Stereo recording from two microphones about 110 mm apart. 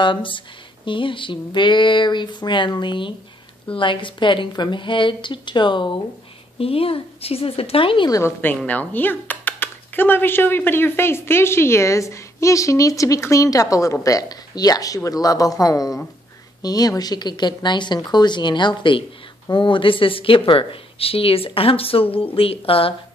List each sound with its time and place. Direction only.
0.0 s a woman's voice: 50° left (ahead or behind)
6.6 s speech: 60° left (ahead or behind)
8.4 s speech: 15° left (ahead or behind); by 22.9 s 60° left (ahead or behind)